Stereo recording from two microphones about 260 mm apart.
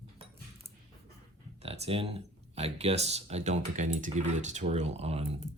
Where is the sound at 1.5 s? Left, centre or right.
Right.